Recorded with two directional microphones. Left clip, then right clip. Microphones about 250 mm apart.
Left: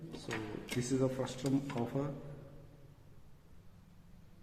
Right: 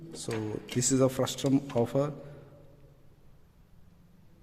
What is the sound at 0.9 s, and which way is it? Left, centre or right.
Speech, right.